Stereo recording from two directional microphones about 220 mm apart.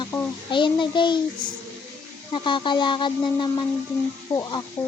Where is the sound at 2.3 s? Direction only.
20° left (ahead or behind).